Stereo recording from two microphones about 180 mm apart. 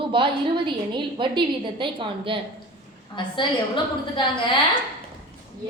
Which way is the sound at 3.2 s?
25° left (ahead or behind).